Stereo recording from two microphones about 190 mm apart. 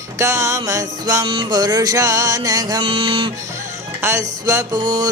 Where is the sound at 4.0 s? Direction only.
15° right (ahead or behind).